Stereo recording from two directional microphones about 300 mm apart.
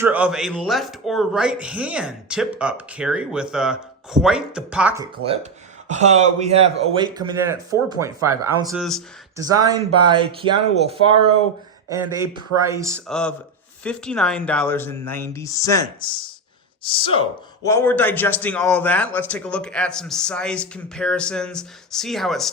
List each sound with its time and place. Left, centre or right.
0.0 s a man's voice: centre
5.1 s speech: centre
9.6 s speech: centre
13.1 s a man's voice: centre